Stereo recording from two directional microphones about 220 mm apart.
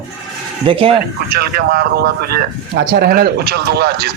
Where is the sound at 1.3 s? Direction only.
45° right (ahead or behind).